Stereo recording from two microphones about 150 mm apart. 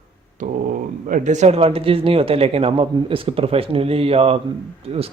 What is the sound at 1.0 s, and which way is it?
Speech, 60° right (ahead or behind).